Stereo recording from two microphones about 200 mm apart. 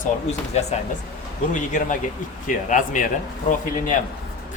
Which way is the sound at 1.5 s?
40° left (ahead or behind).